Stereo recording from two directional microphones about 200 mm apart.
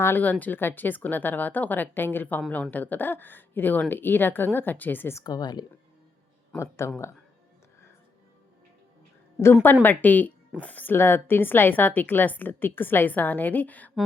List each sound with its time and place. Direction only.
0.0 s a woman's voice: 10° left (ahead or behind)
9.8 s a woman's voice: 10° left (ahead or behind)